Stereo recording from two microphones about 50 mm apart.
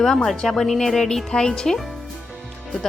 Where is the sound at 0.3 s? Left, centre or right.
Centre.